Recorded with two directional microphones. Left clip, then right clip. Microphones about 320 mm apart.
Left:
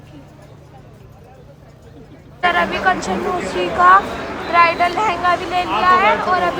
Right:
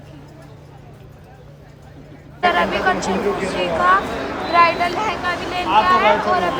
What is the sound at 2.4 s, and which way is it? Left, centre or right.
Speech, centre.